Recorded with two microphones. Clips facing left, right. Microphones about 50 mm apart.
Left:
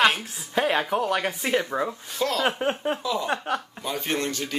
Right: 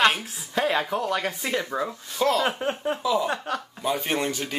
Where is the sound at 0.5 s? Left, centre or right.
Centre.